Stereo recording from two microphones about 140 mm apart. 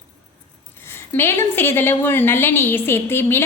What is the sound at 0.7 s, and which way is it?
A woman's voice, 15° left (ahead or behind).